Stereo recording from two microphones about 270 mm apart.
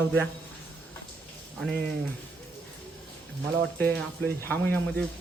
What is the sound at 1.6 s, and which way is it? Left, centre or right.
Speech, centre.